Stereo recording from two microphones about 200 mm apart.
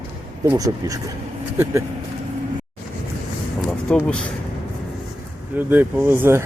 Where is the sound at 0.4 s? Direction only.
15° right (ahead or behind).